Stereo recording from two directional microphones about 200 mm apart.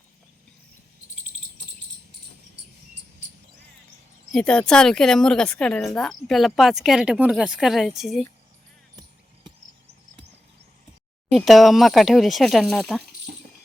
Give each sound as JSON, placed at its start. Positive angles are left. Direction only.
{"t": 4.3, "sound": "a woman's voice", "side_deg": 5}
{"t": 11.3, "sound": "a woman's voice", "side_deg": 0}
{"t": 13.3, "sound": "a sound", "side_deg": -45}